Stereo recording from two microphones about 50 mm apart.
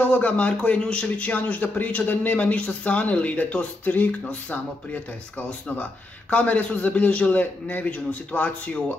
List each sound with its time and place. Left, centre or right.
0.0 s a man's voice: left
6.3 s a man's voice: left